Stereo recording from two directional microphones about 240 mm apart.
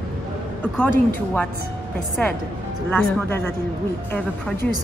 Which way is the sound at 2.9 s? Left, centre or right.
Centre.